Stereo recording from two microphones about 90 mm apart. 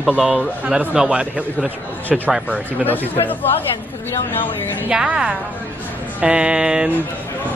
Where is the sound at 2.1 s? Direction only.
Centre (ahead or behind).